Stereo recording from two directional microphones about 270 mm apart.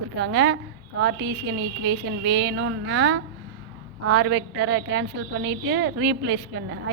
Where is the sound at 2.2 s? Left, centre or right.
Right.